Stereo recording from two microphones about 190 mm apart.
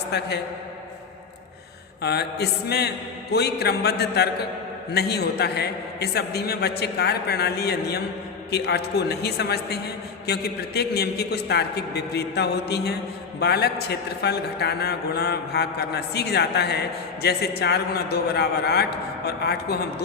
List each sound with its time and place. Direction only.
0.1 s a man's voice: 60° left (ahead or behind)
2.0 s a man's voice: 60° left (ahead or behind)